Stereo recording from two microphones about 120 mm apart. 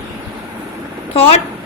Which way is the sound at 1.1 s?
55° left (ahead or behind).